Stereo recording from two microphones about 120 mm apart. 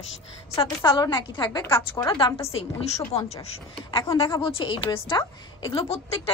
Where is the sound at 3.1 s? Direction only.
60° left (ahead or behind).